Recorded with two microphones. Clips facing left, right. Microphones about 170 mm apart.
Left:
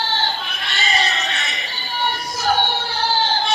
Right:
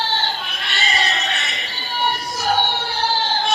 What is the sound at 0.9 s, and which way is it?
Music, centre (ahead or behind).